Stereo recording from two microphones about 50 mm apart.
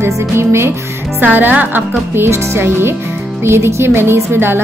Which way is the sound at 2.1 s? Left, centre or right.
Right.